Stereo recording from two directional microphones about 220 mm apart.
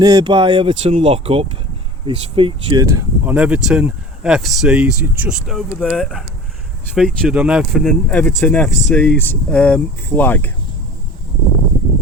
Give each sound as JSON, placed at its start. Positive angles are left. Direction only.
{"t": 0.0, "sound": "speech", "side_deg": -20}